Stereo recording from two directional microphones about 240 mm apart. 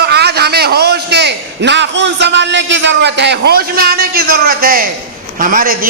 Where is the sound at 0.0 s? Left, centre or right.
Right.